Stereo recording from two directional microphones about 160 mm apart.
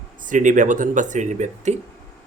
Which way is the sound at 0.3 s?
50° right (ahead or behind).